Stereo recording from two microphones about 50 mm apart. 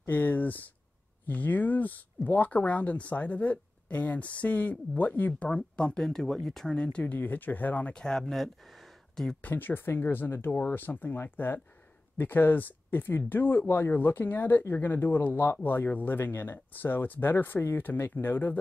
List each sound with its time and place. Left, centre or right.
0.0 s speech: left
5.5 s speech: centre
6.7 s speech: left
7.2 s speech: left
7.9 s speech: centre
9.4 s speech: left
13.7 s speech: left
13.9 s speech: left